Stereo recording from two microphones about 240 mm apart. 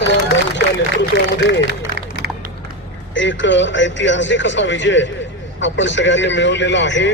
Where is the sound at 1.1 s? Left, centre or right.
Left.